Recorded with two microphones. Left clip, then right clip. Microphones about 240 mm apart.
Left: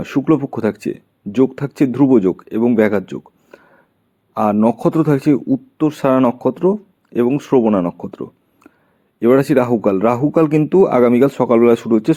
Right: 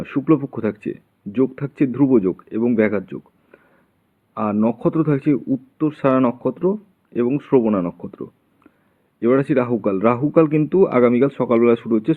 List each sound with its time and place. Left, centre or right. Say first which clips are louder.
0.0 s speech: left 3 dB; left